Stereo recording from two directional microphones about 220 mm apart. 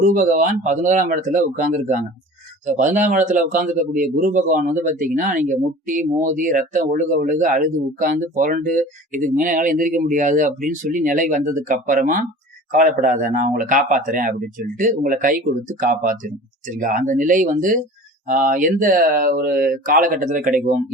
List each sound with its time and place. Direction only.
0.0 s speech: 35° right (ahead or behind)